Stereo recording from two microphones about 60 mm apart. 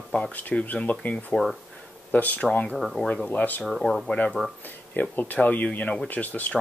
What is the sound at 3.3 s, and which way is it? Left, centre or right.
Speech, left.